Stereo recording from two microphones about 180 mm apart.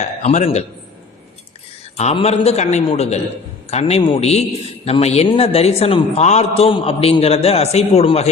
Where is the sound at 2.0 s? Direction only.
35° left (ahead or behind).